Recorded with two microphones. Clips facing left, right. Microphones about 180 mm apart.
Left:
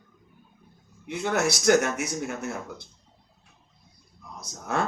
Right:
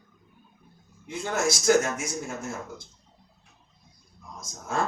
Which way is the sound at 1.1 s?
65° left (ahead or behind).